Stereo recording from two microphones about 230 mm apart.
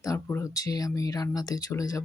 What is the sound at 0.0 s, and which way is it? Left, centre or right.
Speech, centre.